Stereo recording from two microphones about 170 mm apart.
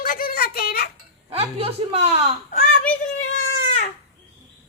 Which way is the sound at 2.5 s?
50° left (ahead or behind).